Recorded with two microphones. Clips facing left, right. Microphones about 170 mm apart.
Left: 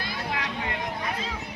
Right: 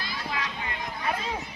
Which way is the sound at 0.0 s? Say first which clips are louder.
Left 2 dB; 60° left (ahead or behind).